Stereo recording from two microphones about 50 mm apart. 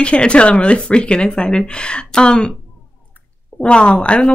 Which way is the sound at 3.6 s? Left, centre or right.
Left.